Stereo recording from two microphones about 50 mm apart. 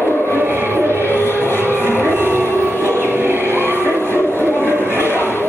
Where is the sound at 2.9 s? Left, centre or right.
Right.